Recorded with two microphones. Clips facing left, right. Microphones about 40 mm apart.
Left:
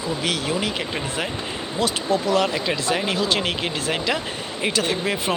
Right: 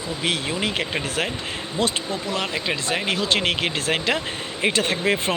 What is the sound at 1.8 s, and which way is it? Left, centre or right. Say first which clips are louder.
Speech: even; right.